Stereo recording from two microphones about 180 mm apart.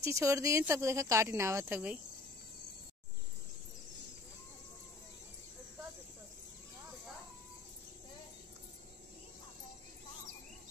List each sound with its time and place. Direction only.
0.0 s speech: 15° right (ahead or behind)